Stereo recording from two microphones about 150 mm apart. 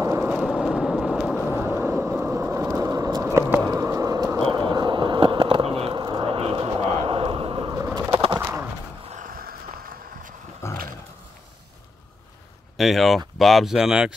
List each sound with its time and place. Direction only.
0.0 s vehicle: 15° right (ahead or behind)
3.3 s a sound: 15° right (ahead or behind)
3.7 s vehicle: 20° right (ahead or behind)
7.7 s bird: 20° right (ahead or behind)
8.1 s bird: 35° right (ahead or behind)
8.4 s bird: 10° right (ahead or behind)
9.1 s a sound: 70° right (ahead or behind)
10.6 s roaring cats: 15° left (ahead or behind)
12.7 s speech: centre (ahead or behind)